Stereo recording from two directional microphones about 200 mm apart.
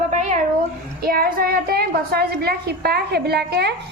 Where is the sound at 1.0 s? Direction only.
50° right (ahead or behind).